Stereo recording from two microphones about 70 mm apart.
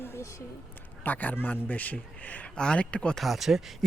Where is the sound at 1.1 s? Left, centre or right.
Left.